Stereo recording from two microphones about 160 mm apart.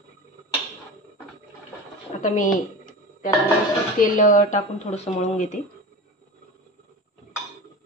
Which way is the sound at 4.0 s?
55° left (ahead or behind).